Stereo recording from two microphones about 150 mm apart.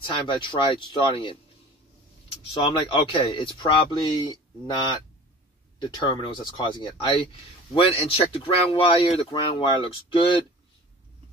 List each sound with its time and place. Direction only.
0.0 s speech: 30° left (ahead or behind)
2.5 s speech: 35° left (ahead or behind)